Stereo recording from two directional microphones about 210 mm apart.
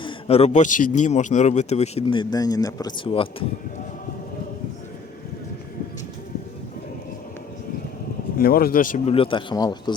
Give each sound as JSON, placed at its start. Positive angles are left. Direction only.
{"t": 0.0, "sound": "speech", "side_deg": 30}
{"t": 8.4, "sound": "speech", "side_deg": 45}
{"t": 9.1, "sound": "speech", "side_deg": 25}